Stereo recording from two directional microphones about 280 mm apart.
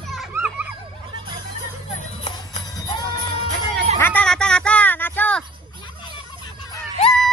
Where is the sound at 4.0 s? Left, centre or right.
Centre.